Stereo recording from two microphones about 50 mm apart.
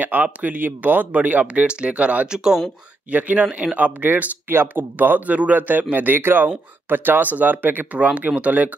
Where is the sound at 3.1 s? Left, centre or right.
Right.